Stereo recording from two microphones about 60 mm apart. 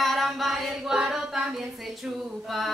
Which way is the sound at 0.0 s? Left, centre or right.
Centre.